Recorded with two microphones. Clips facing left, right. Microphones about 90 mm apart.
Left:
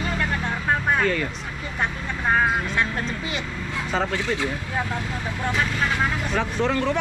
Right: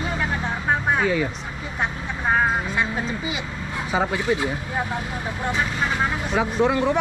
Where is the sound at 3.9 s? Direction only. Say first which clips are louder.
Right 3 dB; 15° right (ahead or behind).